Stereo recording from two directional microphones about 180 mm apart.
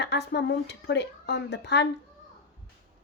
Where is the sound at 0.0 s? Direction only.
65° left (ahead or behind).